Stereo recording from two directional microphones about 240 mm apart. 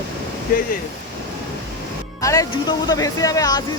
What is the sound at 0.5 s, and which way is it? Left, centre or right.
Speech, left.